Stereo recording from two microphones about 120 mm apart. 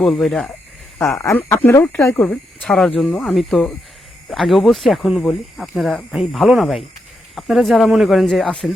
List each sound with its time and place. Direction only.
0.0 s speech: centre (ahead or behind)
1.2 s speech: 25° left (ahead or behind)
2.2 s speech: 5° left (ahead or behind)